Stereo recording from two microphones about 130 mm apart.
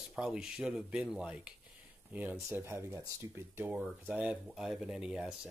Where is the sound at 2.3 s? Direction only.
20° right (ahead or behind).